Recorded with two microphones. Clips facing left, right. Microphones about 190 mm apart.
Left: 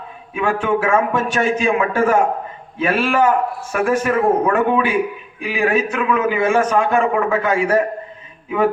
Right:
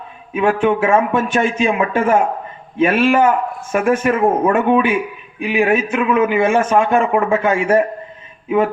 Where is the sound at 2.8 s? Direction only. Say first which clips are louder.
Right 4 dB; 20° right (ahead or behind).